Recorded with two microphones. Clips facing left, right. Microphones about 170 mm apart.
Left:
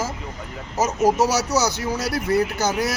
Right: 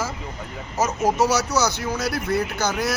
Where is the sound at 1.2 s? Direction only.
40° left (ahead or behind).